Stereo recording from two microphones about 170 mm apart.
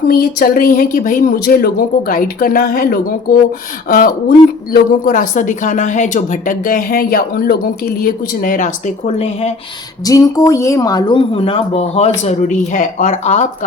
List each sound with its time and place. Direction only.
0.1 s a woman's voice: 60° left (ahead or behind)
8.0 s a woman's voice: 55° left (ahead or behind); by 9.5 s 35° left (ahead or behind)
10.0 s speech: 20° left (ahead or behind); by 13.7 s 40° left (ahead or behind)